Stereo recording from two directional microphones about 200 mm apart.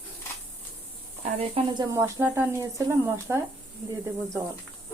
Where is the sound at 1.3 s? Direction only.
30° right (ahead or behind); by 3.4 s 10° right (ahead or behind).